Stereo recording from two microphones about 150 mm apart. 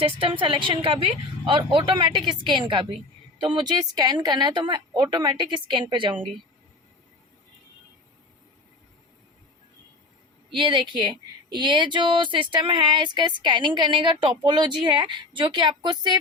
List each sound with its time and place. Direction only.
0.0 s a woman's voice: 35° right (ahead or behind)
10.5 s a woman's voice: 35° right (ahead or behind)